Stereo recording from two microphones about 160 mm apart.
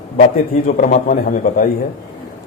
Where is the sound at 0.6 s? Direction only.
55° left (ahead or behind).